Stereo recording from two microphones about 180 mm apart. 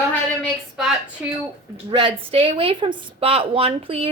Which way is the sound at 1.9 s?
30° right (ahead or behind).